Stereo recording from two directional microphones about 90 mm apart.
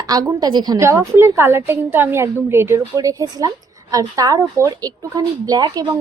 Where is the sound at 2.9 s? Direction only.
40° right (ahead or behind).